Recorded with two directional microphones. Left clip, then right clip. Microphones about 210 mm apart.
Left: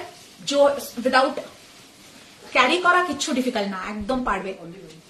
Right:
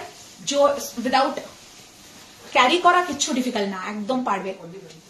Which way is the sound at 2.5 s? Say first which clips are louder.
Right 1 dB; 15° left (ahead or behind).